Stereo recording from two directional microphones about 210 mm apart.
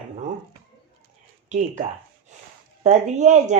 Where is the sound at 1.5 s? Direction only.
35° right (ahead or behind).